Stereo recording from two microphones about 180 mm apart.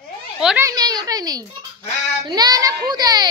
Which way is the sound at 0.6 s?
20° right (ahead or behind).